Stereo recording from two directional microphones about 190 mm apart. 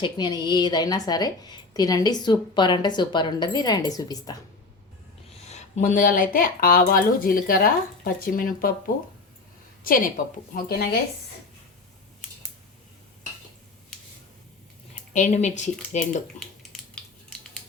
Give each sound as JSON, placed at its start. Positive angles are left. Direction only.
{"t": 0.0, "sound": "a woman's voice", "side_deg": 25}
{"t": 5.3, "sound": "speech", "side_deg": 35}
{"t": 9.8, "sound": "a woman's voice", "side_deg": 45}
{"t": 15.1, "sound": "speech", "side_deg": 40}
{"t": 16.2, "sound": "a sound", "side_deg": 5}